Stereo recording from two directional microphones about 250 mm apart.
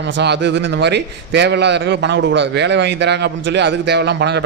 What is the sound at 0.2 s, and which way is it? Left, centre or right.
A man's voice, right.